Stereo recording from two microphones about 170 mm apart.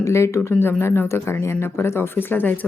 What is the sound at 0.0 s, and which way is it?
Speech, 15° left (ahead or behind).